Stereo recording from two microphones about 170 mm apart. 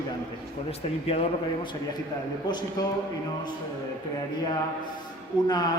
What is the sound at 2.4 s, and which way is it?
Speech, 25° left (ahead or behind).